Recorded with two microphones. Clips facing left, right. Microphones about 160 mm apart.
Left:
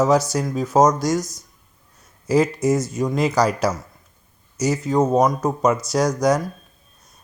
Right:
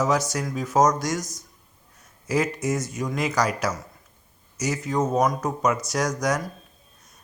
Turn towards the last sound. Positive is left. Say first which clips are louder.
# left 6 dB
turn(degrees=30)  # may be behind; listen again after turning